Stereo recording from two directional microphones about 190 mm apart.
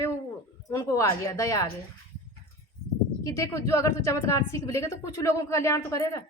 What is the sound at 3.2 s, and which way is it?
A woman's voice, 15° left (ahead or behind).